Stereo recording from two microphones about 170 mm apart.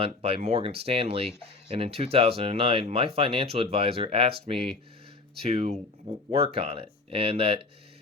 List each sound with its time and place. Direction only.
0.0 s speech: 35° right (ahead or behind)